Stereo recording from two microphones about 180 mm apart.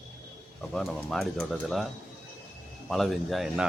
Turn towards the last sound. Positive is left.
turn(degrees=0)  # may be behind; listen again after turning